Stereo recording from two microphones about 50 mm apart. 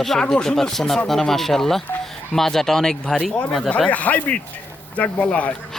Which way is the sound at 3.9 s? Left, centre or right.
Left.